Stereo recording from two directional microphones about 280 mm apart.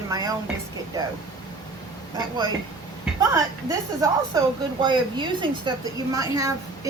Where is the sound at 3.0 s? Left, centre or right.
Centre.